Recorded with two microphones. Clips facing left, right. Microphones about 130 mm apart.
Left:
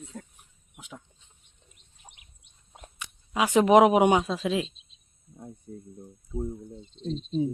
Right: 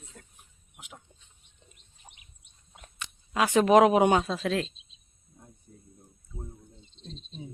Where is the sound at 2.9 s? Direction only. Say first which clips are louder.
Even; 10° left (ahead or behind).